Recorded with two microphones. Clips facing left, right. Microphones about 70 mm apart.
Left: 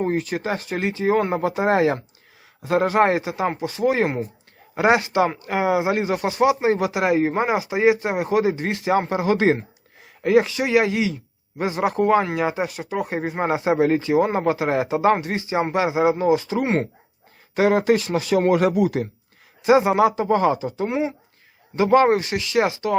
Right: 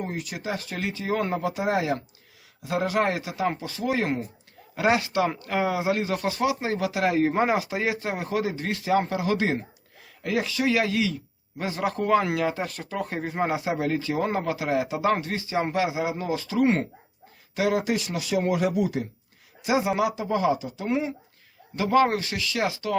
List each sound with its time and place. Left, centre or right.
0.0 s speech: left
0.6 s speech: left
19.6 s speech: left